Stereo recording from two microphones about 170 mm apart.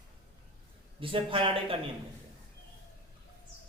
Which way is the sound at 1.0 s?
30° right (ahead or behind).